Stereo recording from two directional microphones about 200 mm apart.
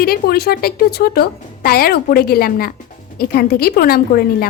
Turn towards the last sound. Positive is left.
turn(degrees=50)  # may be behind; listen again after turning